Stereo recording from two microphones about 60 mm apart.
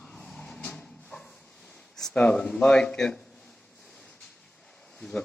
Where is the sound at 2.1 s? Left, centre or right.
Centre.